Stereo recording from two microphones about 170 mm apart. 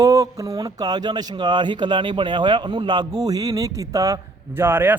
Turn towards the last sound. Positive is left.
turn(degrees=-15)  # may be behind; listen again after turning